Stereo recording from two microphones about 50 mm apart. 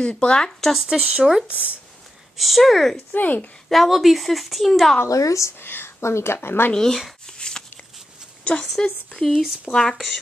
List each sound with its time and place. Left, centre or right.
0.0 s speech: left
0.7 s speech: centre
1.5 s speech: right
2.3 s speech: centre
3.1 s speech: left
3.6 s speech: centre
5.0 s speech: left
5.6 s speech: left
6.7 s speech: centre
7.2 s a sound: centre
8.6 s speech: centre